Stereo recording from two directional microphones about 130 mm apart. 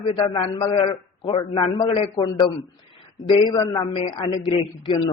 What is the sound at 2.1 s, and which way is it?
A man's voice, 30° left (ahead or behind).